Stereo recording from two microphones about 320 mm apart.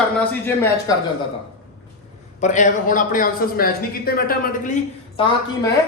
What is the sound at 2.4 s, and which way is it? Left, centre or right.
Speech, left.